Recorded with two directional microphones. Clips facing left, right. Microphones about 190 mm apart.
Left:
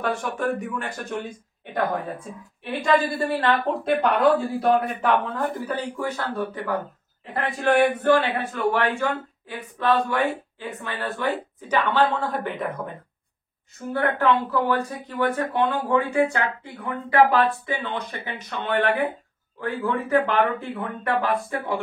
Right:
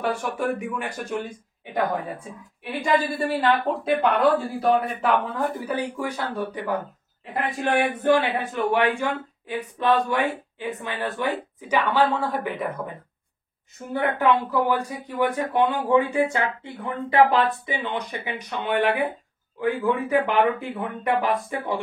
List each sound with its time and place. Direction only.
0.0 s a woman's voice: 10° right (ahead or behind)
2.8 s a woman's voice: 10° right (ahead or behind)
5.3 s a woman's voice: 10° right (ahead or behind)
8.0 s a woman's voice: 15° right (ahead or behind)